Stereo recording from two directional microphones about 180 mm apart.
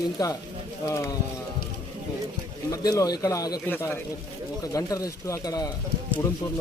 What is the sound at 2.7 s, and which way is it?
Speech, 20° left (ahead or behind).